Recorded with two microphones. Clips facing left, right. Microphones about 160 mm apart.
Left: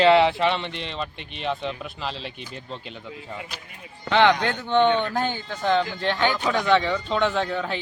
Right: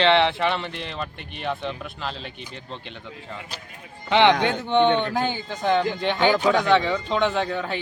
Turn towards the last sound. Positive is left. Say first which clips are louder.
# even
turn(degrees=-10)  # may be behind; listen again after turning